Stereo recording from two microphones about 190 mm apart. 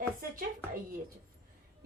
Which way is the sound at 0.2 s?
50° right (ahead or behind).